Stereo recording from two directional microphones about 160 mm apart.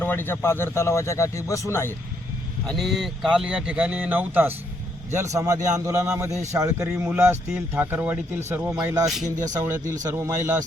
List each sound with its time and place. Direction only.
0.0 s a man's voice: 10° left (ahead or behind)
2.6 s speech: centre (ahead or behind); by 6.8 s 20° right (ahead or behind)
6.8 s speech: 10° right (ahead or behind)
9.0 s speech: centre (ahead or behind)
9.4 s speech: 20° right (ahead or behind)